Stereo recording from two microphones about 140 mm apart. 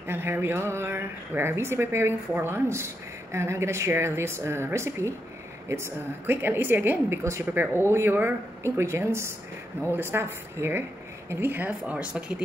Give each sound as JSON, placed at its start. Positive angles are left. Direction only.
{"t": 0.0, "sound": "speech", "side_deg": -15}